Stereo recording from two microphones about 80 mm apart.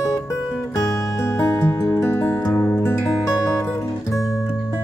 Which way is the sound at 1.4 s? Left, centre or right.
Left.